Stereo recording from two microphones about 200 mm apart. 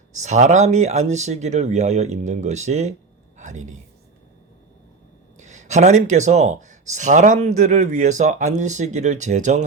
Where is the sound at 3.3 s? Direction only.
35° right (ahead or behind).